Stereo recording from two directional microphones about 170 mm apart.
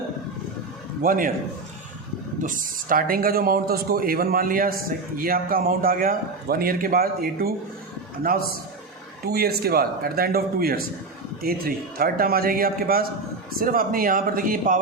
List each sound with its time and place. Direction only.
1.0 s a man's voice: 55° right (ahead or behind)
2.4 s a man's voice: 50° right (ahead or behind)
9.2 s a man's voice: 65° right (ahead or behind)